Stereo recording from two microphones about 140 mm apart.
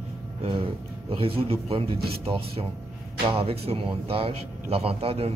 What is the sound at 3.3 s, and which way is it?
A man's voice, 40° right (ahead or behind).